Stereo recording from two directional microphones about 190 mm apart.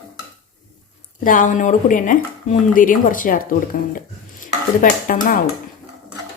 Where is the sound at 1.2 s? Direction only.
45° left (ahead or behind).